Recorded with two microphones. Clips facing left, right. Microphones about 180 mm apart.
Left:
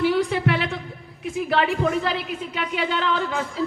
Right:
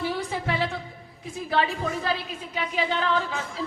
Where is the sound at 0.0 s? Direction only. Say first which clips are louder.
Left 8 dB; 70° left (ahead or behind).